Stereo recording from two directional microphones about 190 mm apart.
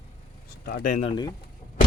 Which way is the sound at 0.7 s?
55° left (ahead or behind).